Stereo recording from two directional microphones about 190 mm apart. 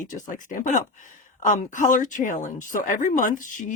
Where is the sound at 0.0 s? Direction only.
40° left (ahead or behind).